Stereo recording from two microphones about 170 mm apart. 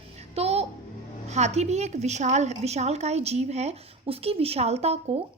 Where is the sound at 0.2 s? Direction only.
40° right (ahead or behind).